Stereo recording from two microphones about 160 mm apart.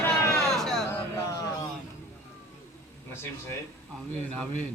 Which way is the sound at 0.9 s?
15° left (ahead or behind).